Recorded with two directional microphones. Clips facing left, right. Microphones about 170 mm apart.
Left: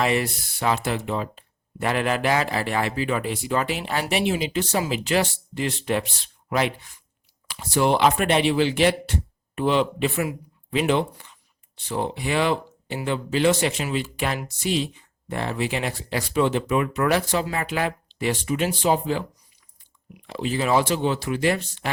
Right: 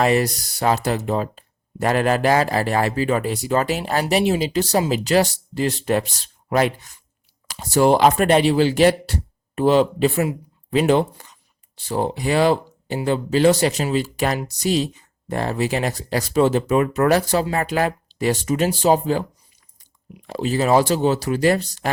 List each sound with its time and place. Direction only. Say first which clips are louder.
0.0 s speech: right 5 dB; 40° right (ahead or behind)
20.2 s speech: right 4 dB; 40° right (ahead or behind)